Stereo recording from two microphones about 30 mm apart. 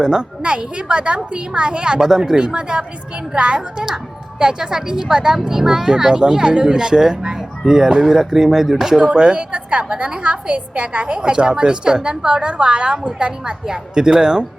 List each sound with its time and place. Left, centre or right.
0.0 s a woman's voice: right
2.6 s a woman's voice: right
4.4 s a woman's voice: right
7.6 s speech: centre
9.0 s a woman's voice: right
9.7 s a woman's voice: right
13.7 s a woman's voice: right